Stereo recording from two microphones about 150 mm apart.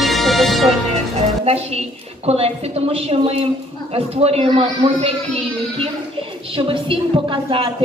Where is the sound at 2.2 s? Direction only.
40° right (ahead or behind).